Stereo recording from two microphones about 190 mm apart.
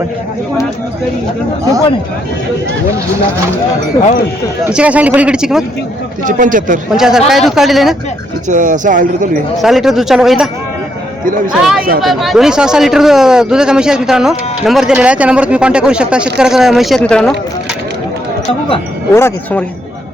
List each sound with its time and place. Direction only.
4.6 s speech: 5° right (ahead or behind)
6.2 s speech: 45° right (ahead or behind)
6.9 s speech: 5° right (ahead or behind)
8.4 s speech: 45° right (ahead or behind)
9.6 s speech: centre (ahead or behind)
11.5 s speech: centre (ahead or behind)
19.1 s speech: 10° left (ahead or behind)